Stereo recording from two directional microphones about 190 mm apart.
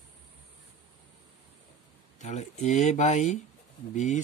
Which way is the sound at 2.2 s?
40° left (ahead or behind).